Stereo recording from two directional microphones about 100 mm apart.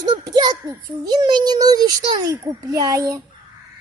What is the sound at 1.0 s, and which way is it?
A child's voice, 45° right (ahead or behind).